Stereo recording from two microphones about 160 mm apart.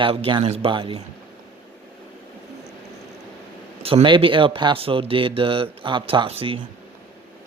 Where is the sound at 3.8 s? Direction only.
35° right (ahead or behind).